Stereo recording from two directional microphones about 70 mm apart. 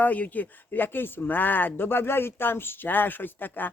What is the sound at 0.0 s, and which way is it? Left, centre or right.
Speech, left.